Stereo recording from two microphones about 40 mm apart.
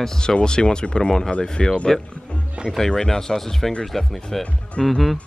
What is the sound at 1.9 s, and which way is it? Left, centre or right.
Speech, centre.